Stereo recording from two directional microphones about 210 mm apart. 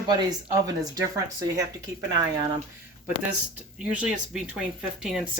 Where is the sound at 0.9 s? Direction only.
15° right (ahead or behind).